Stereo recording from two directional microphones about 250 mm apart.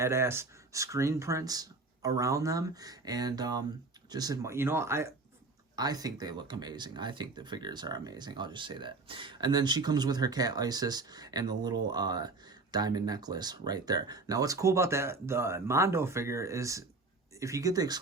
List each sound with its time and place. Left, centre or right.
0.0 s speech: centre